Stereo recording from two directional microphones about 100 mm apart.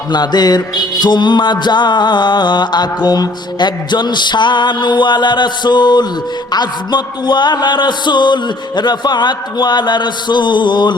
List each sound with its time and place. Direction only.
0.1 s music: 45° left (ahead or behind)